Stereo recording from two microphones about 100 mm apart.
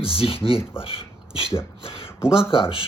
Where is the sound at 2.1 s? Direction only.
25° left (ahead or behind).